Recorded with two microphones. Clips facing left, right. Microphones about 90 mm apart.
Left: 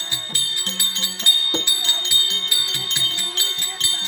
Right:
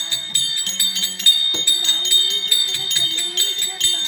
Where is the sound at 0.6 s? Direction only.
40° left (ahead or behind).